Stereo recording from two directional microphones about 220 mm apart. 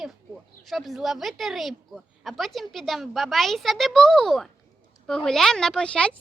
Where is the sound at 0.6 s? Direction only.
Centre (ahead or behind).